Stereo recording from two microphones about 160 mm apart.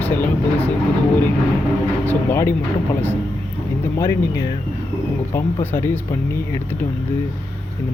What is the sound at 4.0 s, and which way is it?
Speech, 20° left (ahead or behind).